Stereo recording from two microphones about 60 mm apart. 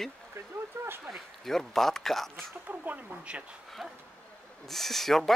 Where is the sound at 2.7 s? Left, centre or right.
Right.